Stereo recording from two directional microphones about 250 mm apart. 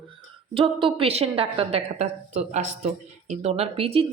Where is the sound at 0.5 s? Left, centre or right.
Right.